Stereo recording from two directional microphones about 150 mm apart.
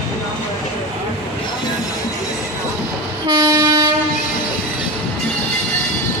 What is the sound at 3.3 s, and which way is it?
Train, 25° right (ahead or behind).